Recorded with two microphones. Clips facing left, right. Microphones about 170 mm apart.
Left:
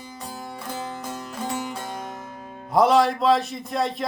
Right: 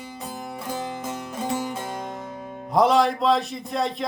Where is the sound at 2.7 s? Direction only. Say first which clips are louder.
Left 1 dB; centre (ahead or behind).